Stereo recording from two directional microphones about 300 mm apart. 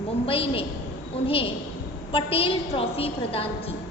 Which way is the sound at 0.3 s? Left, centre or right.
Centre.